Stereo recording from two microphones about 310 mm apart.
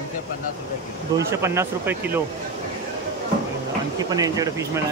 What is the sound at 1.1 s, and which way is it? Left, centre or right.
Speech, centre.